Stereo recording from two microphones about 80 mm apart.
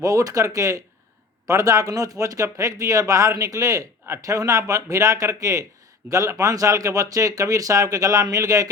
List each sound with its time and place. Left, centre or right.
0.0 s speech: right